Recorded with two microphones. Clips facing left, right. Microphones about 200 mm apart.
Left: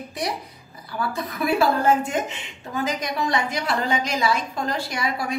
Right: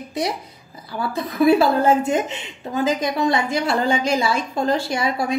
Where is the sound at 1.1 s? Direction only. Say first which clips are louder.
Right 9 dB; 25° right (ahead or behind).